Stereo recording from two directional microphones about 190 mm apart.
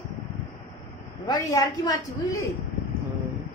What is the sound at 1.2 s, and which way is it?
A woman's voice, 20° left (ahead or behind).